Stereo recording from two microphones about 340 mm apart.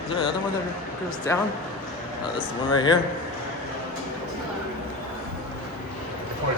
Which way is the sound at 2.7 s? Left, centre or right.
Centre.